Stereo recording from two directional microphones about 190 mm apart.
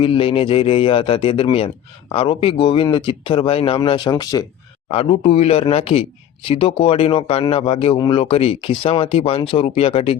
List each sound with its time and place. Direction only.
0.0 s speech: 30° left (ahead or behind)
4.9 s speech: 30° left (ahead or behind)